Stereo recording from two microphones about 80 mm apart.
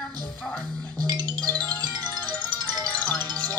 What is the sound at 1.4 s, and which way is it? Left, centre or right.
Music, centre.